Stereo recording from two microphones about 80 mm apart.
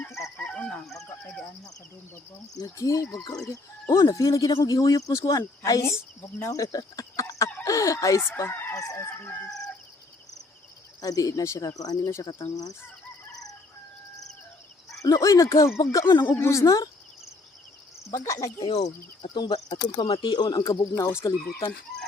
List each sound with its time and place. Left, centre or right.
0.3 s chicken: centre
1.0 s a sound: centre
2.6 s speech: left
8.7 s chicken: left
9.0 s speech: left
11.0 s speech: left
13.3 s crowing: left
15.0 s speech: left
18.1 s speech: left
18.6 s speech: left
20.9 s speech: left